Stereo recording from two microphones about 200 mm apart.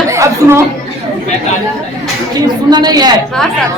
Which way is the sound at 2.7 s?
20° right (ahead or behind).